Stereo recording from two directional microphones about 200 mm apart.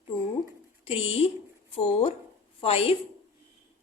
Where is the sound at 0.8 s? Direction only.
30° left (ahead or behind).